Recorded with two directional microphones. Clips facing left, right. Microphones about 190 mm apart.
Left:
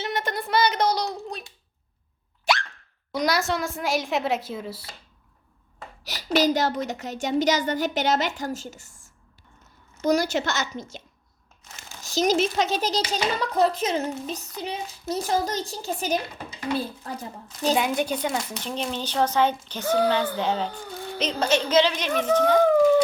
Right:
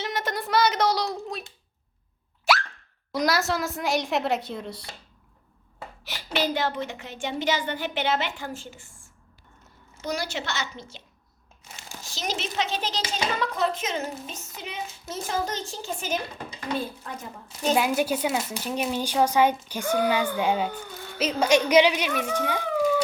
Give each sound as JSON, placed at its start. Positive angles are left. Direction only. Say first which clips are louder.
{"t": 0.0, "sound": "a sound", "louder": "left 1 dB", "side_deg": 0}
{"t": 2.4, "sound": "plop", "louder": "right 1 dB", "side_deg": 0}
{"t": 3.1, "sound": "a woman's voice", "louder": "even", "side_deg": 0}
{"t": 6.1, "sound": "a woman's voice", "louder": "left 6 dB", "side_deg": 40}
{"t": 12.0, "sound": "a woman's voice", "louder": "left 10 dB", "side_deg": 45}
{"t": 17.5, "sound": "speech", "louder": "even", "side_deg": -5}
{"t": 22.6, "sound": "howl", "louder": "left 5 dB", "side_deg": 50}